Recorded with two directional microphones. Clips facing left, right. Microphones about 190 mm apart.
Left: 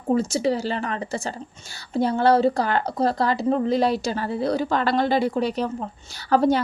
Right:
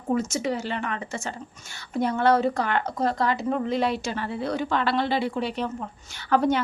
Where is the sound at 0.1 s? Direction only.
35° left (ahead or behind).